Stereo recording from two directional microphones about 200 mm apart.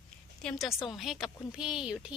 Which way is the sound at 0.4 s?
Centre (ahead or behind).